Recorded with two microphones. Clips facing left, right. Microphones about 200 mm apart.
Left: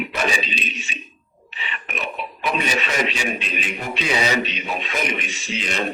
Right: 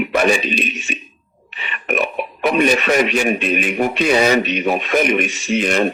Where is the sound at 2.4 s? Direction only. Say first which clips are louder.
Right 9 dB; 55° right (ahead or behind).